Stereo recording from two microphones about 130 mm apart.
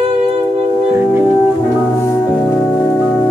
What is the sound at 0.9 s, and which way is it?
Music, 15° right (ahead or behind).